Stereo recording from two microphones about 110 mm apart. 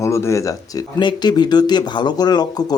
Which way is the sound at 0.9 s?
45° left (ahead or behind).